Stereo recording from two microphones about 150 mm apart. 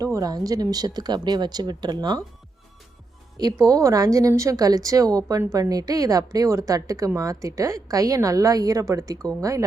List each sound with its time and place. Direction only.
0.0 s speech: 25° right (ahead or behind)
3.3 s speech: 25° right (ahead or behind)